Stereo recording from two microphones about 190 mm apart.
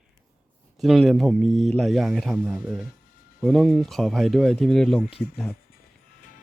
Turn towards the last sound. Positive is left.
turn(degrees=0)  # may be behind; listen again after turning